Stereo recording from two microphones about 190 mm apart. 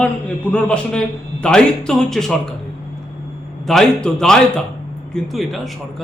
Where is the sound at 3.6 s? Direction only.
Centre (ahead or behind).